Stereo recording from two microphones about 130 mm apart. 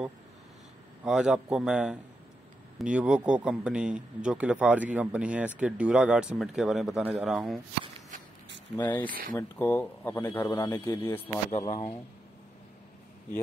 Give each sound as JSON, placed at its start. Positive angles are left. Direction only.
{"t": 1.0, "sound": "a man's voice", "side_deg": -5}
{"t": 8.7, "sound": "speech", "side_deg": 15}
{"t": 11.1, "sound": "a man's voice", "side_deg": 50}